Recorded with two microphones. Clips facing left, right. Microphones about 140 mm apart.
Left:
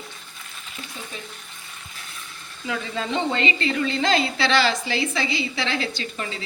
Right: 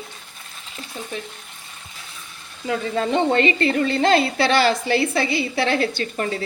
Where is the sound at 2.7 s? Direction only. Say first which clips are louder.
Right 5 dB; 45° right (ahead or behind).